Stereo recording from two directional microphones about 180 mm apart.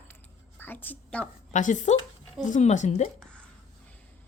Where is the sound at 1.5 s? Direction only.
45° left (ahead or behind).